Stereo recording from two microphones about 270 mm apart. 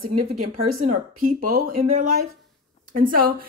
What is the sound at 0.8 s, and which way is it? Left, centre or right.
Speech, right.